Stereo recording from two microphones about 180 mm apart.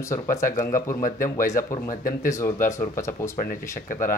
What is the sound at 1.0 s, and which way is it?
Speech, 50° left (ahead or behind).